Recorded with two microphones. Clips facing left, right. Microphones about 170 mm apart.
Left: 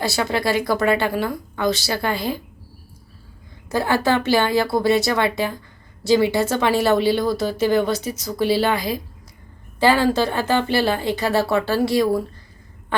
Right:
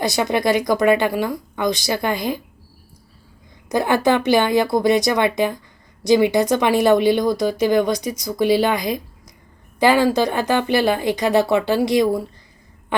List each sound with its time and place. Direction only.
0.0 s speech: 15° right (ahead or behind)
3.7 s speech: 20° right (ahead or behind)
12.9 s a sound: 15° right (ahead or behind)